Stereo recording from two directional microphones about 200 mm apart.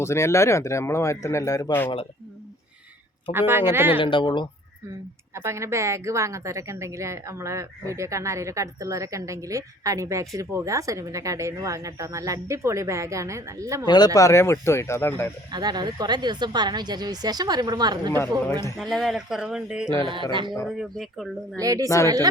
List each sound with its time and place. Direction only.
0.0 s speech: 15° left (ahead or behind)
3.3 s a woman's voice: 10° right (ahead or behind)
3.9 s speech: 25° left (ahead or behind)
5.3 s a woman's voice: 15° right (ahead or behind)
13.8 s speech: 20° left (ahead or behind)
15.5 s a woman's voice: 20° right (ahead or behind)
18.8 s speech: centre (ahead or behind)
21.6 s a woman's voice: 15° right (ahead or behind)